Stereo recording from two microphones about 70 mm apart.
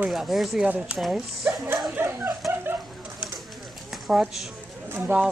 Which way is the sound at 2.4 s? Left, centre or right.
Centre.